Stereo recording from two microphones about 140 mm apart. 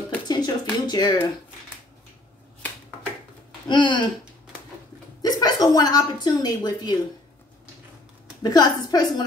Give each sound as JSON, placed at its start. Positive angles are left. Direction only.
{"t": 0.3, "sound": "a sound", "side_deg": 30}
{"t": 3.6, "sound": "speech", "side_deg": 35}
{"t": 5.2, "sound": "a woman's voice", "side_deg": 30}
{"t": 8.4, "sound": "a woman's voice", "side_deg": 25}